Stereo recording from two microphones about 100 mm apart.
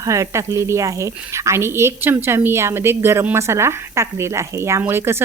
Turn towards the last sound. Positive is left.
turn(degrees=-25)  # may be behind; listen again after turning